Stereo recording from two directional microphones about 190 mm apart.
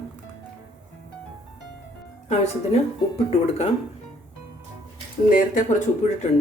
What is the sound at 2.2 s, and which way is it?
Speech, 35° left (ahead or behind).